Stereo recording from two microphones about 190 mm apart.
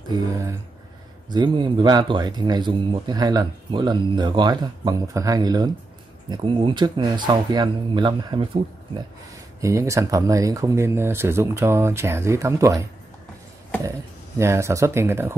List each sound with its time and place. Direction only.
0.1 s speech: 15° right (ahead or behind)
9.6 s speech: 15° right (ahead or behind)
14.4 s speech: 15° right (ahead or behind)